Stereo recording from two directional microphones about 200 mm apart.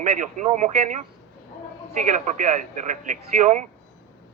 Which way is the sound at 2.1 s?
40° right (ahead or behind).